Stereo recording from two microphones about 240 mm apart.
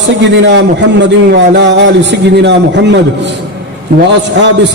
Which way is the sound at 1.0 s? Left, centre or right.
Right.